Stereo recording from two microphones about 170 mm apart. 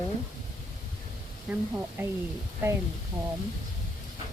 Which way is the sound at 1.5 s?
5° right (ahead or behind).